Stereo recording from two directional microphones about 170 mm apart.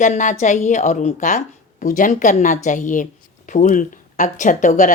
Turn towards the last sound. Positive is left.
turn(degrees=50)  # may be behind; listen again after turning